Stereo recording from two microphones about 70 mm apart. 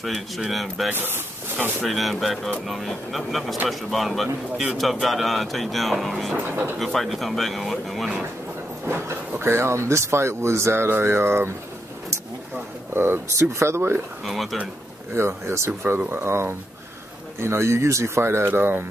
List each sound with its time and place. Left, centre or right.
0.0 s speech: centre
0.9 s speech: right
1.8 s speech: centre
6.3 s speech: right
6.8 s speech: centre
9.0 s speech: right
12.9 s speech: right
14.2 s speech: centre
15.1 s speech: right